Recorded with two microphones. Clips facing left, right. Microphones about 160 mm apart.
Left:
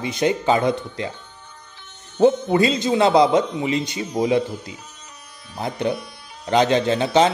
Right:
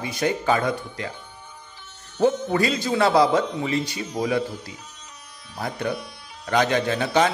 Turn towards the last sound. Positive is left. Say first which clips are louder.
# left 4 dB
turn(degrees=25)  # may be behind; listen again after turning